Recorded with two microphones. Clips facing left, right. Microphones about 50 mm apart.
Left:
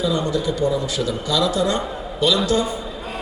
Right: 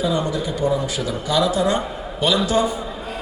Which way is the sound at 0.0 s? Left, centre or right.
Centre.